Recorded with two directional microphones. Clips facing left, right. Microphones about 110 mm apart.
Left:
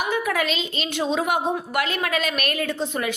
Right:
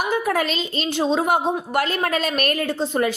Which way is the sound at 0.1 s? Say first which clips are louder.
Right 2 dB; 35° right (ahead or behind).